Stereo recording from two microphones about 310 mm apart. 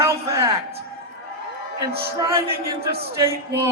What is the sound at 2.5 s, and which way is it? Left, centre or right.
Speech, right.